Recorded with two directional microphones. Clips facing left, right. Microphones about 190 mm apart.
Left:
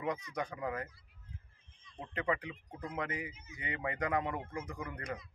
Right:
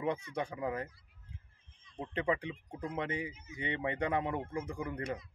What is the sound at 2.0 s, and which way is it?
A man's voice, 25° right (ahead or behind).